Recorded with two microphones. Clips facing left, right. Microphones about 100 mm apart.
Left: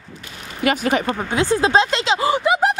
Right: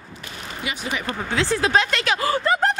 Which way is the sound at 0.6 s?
60° left (ahead or behind).